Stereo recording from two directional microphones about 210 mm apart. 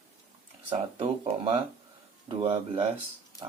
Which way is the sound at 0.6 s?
25° right (ahead or behind).